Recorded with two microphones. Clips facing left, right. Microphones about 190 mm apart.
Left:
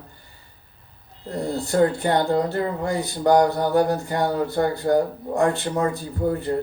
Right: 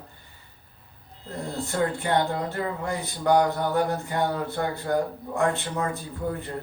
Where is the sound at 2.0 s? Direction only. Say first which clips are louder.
Left 5 dB; 35° left (ahead or behind).